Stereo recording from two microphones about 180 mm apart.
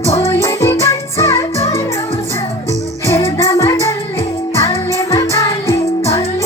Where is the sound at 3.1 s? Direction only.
15° left (ahead or behind).